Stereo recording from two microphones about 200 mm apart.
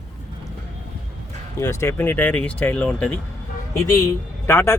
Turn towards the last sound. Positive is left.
turn(degrees=10)  # may be behind; listen again after turning